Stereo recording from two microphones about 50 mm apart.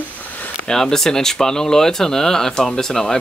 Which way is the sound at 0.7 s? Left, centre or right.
Centre.